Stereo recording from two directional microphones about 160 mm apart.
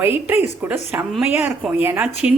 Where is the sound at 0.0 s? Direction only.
15° right (ahead or behind).